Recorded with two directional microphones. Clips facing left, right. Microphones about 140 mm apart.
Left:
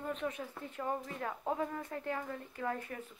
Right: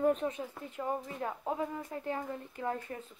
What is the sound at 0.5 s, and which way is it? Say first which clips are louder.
Speech: right 2 dB; 15° right (ahead or behind).